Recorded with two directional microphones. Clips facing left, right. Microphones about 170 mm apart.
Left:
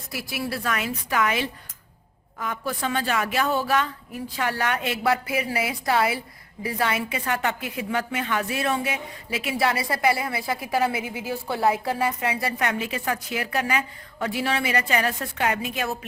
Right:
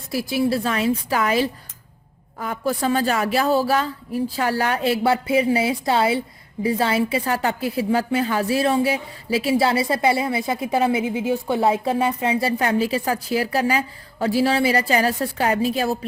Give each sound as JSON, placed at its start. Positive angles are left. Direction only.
{"t": 0.1, "sound": "a woman's voice", "side_deg": -30}